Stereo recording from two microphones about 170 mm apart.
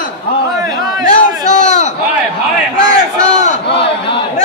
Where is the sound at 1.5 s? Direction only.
45° left (ahead or behind).